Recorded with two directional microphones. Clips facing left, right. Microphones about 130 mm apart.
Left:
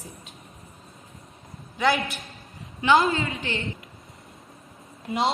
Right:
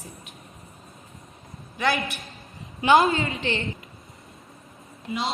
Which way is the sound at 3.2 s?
25° right (ahead or behind).